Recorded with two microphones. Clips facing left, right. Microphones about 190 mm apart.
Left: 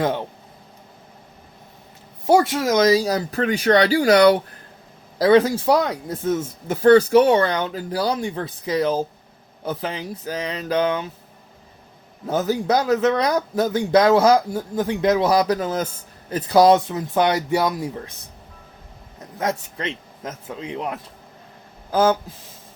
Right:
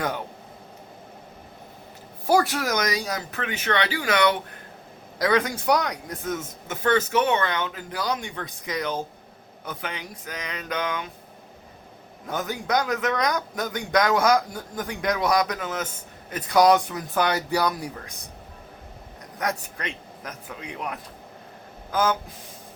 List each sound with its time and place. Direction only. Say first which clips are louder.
0.0 s a sound: left 6 dB; 25° left (ahead or behind)
2.2 s speech: left 5 dB; 25° left (ahead or behind)
12.3 s speech: left 6 dB; 30° left (ahead or behind)
19.4 s speech: left 4 dB; 25° left (ahead or behind)